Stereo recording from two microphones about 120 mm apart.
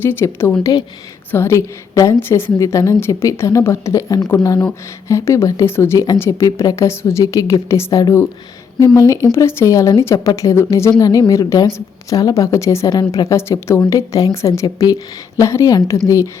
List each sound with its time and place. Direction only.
0.0 s a woman's voice: 20° left (ahead or behind)
0.6 s a woman's voice: 35° left (ahead or behind)
1.3 s a woman's voice: 20° left (ahead or behind)
9.3 s a woman's voice: 20° left (ahead or behind)